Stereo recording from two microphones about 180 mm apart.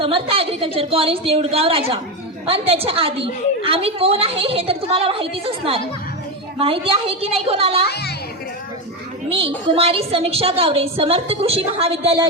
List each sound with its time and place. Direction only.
0.0 s a woman's voice: 30° right (ahead or behind)
7.9 s speech: 65° left (ahead or behind)
9.3 s a woman's voice: 30° right (ahead or behind)